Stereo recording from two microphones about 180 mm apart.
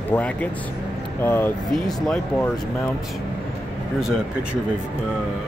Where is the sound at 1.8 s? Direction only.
Centre (ahead or behind).